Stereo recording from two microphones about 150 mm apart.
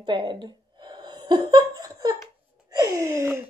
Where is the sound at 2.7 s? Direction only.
25° right (ahead or behind).